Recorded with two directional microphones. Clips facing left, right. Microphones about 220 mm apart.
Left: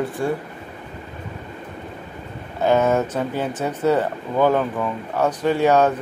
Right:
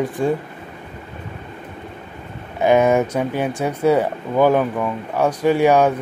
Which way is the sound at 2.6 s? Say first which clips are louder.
Right 3 dB; 15° right (ahead or behind).